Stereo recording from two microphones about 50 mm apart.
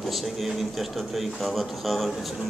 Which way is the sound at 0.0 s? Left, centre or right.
Centre.